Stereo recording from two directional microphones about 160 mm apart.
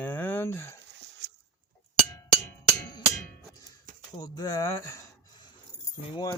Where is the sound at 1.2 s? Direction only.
90° right.